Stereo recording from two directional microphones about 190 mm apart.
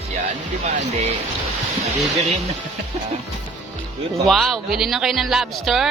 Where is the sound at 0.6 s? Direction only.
40° right (ahead or behind).